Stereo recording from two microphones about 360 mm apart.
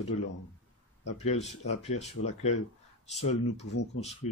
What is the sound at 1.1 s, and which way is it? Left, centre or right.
Speech, centre.